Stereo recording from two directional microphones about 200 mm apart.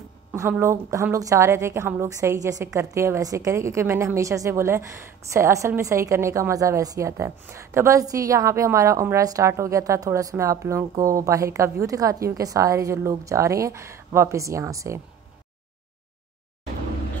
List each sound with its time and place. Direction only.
0.3 s a woman's voice: 10° right (ahead or behind)